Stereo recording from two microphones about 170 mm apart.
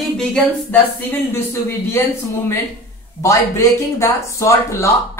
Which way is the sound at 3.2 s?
15° left (ahead or behind).